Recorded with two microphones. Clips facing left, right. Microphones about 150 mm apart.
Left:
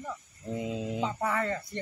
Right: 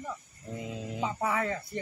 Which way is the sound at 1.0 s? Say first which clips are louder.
Right 2 dB; 10° right (ahead or behind).